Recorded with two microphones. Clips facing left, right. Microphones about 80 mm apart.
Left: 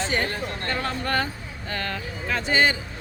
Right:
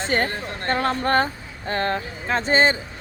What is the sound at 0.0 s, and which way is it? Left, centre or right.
Speech, right.